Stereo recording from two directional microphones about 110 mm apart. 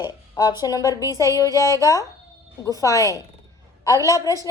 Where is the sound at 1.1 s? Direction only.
30° right (ahead or behind).